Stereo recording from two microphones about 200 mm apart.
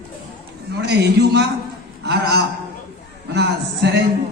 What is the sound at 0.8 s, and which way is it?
A man's voice, 55° right (ahead or behind).